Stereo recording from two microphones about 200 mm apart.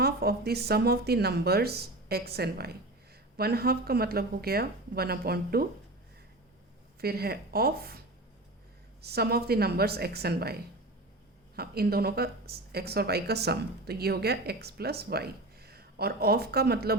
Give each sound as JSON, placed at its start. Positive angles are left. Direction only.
{"t": 0.0, "sound": "speech", "side_deg": -50}
{"t": 7.0, "sound": "speech", "side_deg": -50}